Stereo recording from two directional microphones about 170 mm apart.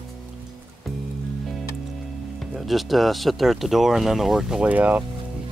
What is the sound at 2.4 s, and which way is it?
Speech, centre (ahead or behind).